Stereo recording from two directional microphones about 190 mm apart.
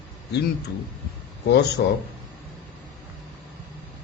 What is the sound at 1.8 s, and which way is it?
Speech, 55° left (ahead or behind).